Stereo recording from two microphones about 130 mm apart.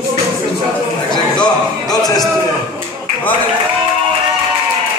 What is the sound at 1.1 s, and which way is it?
Music, 30° left (ahead or behind).